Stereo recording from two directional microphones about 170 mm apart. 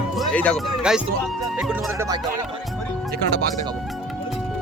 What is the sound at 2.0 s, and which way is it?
Speech, 20° right (ahead or behind).